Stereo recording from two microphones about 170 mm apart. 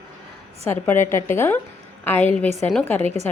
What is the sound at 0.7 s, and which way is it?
A woman's voice, 15° left (ahead or behind).